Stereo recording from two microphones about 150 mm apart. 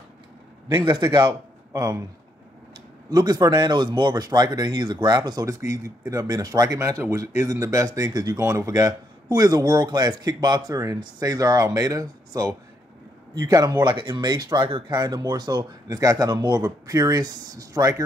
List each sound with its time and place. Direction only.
0.8 s a man's voice: 30° right (ahead or behind)
3.1 s speech: 25° right (ahead or behind)